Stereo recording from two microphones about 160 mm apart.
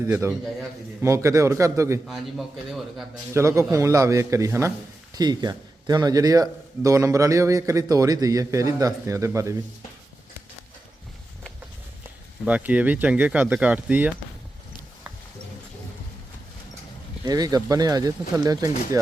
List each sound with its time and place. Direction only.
0.0 s a man's voice: 15° right (ahead or behind)
2.6 s speech: centre (ahead or behind)
3.3 s a man's voice: 20° right (ahead or behind)
12.5 s speech: 10° right (ahead or behind)
17.2 s a man's voice: 25° right (ahead or behind)